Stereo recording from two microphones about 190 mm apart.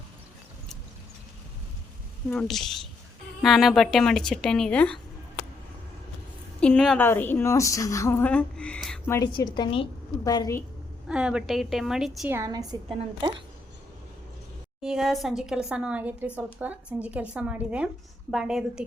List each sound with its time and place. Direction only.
2.3 s a woman's voice: centre (ahead or behind)
6.6 s a woman's voice: 5° left (ahead or behind)
9.1 s a woman's voice: 20° left (ahead or behind)
11.1 s a woman's voice: 5° right (ahead or behind)
12.3 s a woman's voice: 20° right (ahead or behind)
14.8 s a woman's voice: centre (ahead or behind)